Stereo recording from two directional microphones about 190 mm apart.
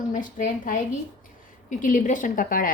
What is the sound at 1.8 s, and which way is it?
Speech, 45° left (ahead or behind).